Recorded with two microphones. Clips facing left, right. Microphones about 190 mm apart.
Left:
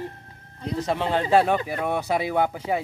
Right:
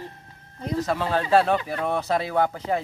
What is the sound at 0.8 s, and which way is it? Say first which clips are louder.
Speech: left 1 dB; 20° left (ahead or behind).